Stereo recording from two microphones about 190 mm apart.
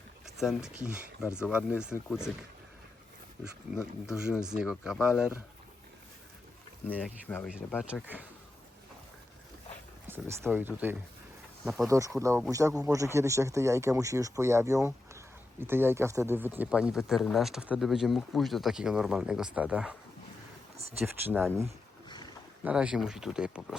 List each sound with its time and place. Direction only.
0.3 s speech: centre (ahead or behind)
4.0 s speech: 5° right (ahead or behind)
6.8 s speech: 10° left (ahead or behind)
7.9 s speech: 5° right (ahead or behind)
10.1 s speech: 10° right (ahead or behind)
11.9 s speech: 15° right (ahead or behind)
21.0 s speech: 10° right (ahead or behind)
22.6 s speech: 5° right (ahead or behind)